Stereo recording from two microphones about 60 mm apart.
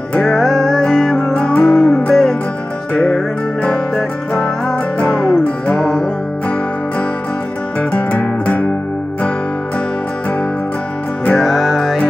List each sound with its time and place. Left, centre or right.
0.3 s music: centre
3.6 s music: centre
5.8 s music: centre
7.9 s music: left
11.3 s music: centre